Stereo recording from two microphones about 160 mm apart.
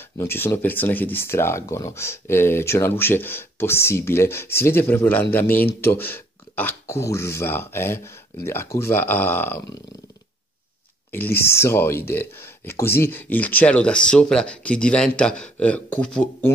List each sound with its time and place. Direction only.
0.2 s speech: 15° left (ahead or behind)
11.1 s speech: 15° left (ahead or behind)